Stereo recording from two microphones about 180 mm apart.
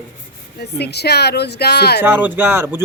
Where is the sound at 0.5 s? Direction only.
65° left (ahead or behind).